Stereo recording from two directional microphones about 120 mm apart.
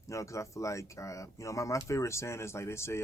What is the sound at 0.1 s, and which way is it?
A man's voice, 25° left (ahead or behind).